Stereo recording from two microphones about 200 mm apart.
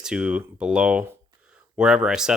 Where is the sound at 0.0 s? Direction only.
5° right (ahead or behind).